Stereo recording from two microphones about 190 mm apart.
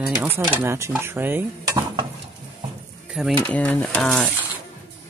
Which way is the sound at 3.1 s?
Centre (ahead or behind).